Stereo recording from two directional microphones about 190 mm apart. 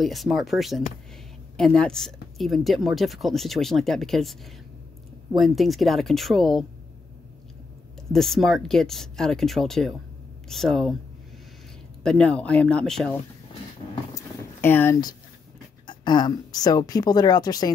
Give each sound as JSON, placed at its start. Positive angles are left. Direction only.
{"t": 0.0, "sound": "speech", "side_deg": 0}
{"t": 8.1, "sound": "speech", "side_deg": 0}
{"t": 12.0, "sound": "speech", "side_deg": 5}
{"t": 14.1, "sound": "a sound", "side_deg": 10}
{"t": 15.9, "sound": "speech", "side_deg": 25}